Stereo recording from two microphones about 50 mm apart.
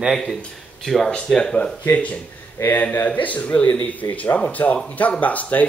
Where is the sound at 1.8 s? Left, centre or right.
Left.